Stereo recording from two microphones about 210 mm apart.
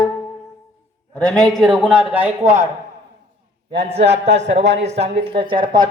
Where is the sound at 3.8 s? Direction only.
30° right (ahead or behind).